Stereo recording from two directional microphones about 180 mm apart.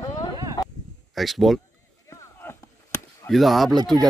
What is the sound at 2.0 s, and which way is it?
Chop, 15° left (ahead or behind).